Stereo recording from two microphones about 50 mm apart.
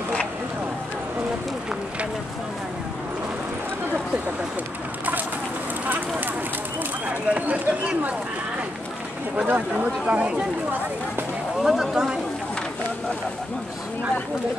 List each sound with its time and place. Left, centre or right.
5.9 s a sound: right
7.1 s speech: right
9.5 s speech: right
11.6 s speech: centre